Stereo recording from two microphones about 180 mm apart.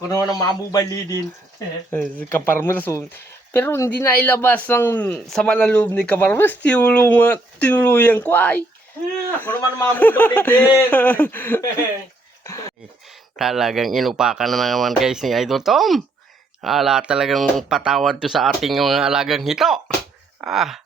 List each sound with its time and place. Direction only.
0.1 s a man's voice: 20° left (ahead or behind)
1.9 s speech: 10° left (ahead or behind)
13.3 s speech: centre (ahead or behind)